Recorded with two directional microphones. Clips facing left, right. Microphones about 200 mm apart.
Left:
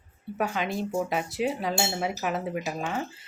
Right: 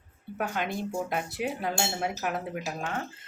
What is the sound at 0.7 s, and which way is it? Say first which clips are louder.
Speech: left 3 dB; 25° left (ahead or behind).